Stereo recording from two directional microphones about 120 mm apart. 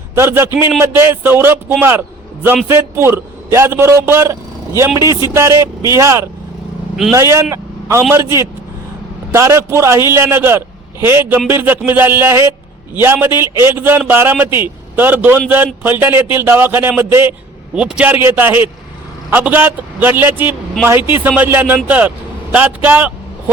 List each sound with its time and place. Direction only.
0.1 s a man's voice: 20° right (ahead or behind)
7.5 s vehicle: 25° right (ahead or behind)
9.3 s a man's voice: 25° right (ahead or behind); by 18.1 s 10° right (ahead or behind)
18.1 s speech: 20° right (ahead or behind)